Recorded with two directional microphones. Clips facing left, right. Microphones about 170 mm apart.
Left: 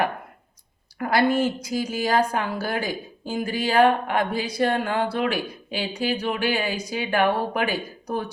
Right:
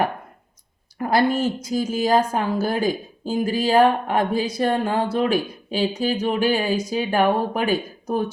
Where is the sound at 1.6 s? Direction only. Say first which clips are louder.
Right 4 dB; 25° right (ahead or behind).